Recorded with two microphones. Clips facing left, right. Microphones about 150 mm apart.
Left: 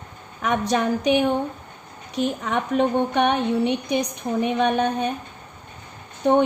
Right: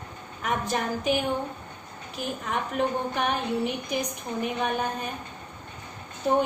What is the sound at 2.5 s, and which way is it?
A woman's voice, 75° left (ahead or behind).